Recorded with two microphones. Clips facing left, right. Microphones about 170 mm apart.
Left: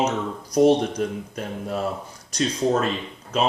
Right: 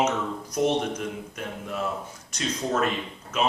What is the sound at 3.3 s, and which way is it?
Speech, 35° left (ahead or behind).